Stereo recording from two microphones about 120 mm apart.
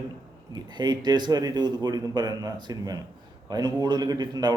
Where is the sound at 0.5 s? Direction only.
35° right (ahead or behind).